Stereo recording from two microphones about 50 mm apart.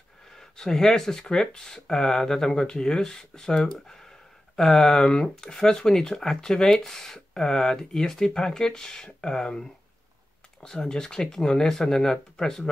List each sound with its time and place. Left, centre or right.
0.4 s speech: centre
10.7 s speech: centre